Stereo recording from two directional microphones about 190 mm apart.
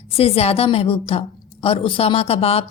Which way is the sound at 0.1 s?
30° left (ahead or behind).